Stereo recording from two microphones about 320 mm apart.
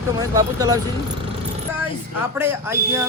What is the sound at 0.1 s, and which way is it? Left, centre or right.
Speech, centre.